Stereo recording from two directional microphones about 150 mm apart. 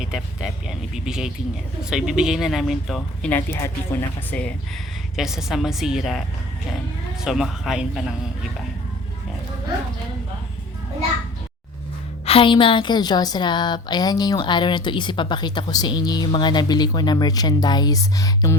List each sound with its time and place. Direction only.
0.7 s speech: 5° right (ahead or behind)
3.2 s speech: 10° left (ahead or behind)
5.1 s speech: 5° right (ahead or behind)
7.3 s speech: centre (ahead or behind)
12.2 s a woman's voice: 35° left (ahead or behind)